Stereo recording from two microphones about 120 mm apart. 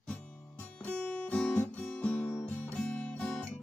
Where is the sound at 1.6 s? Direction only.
10° left (ahead or behind).